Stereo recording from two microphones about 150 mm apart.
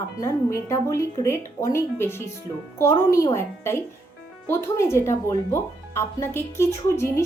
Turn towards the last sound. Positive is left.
turn(degrees=20)  # may be behind; listen again after turning